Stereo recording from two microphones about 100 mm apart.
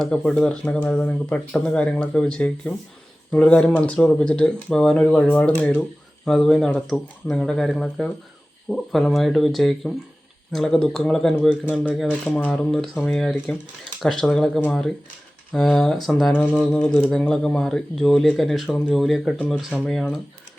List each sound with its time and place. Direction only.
0.0 s speech: 10° left (ahead or behind)
16.3 s speech: 15° left (ahead or behind)